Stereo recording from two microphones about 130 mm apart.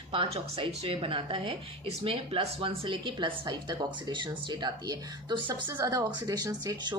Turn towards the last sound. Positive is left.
turn(degrees=-30)  # may be behind; listen again after turning